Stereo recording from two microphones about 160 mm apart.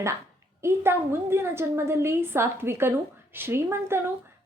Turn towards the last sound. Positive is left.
turn(degrees=-15)  # may be behind; listen again after turning